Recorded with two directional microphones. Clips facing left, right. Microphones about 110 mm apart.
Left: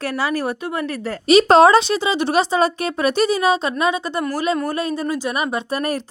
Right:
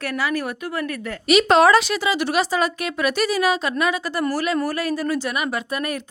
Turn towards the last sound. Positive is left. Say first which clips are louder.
# left 3 dB
turn(degrees=35)  # may be behind; listen again after turning